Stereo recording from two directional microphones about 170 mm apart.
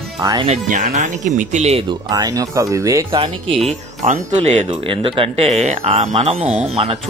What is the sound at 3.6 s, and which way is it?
Speech, 45° right (ahead or behind).